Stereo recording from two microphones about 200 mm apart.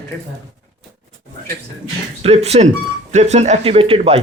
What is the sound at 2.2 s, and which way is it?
A man's voice, 30° right (ahead or behind).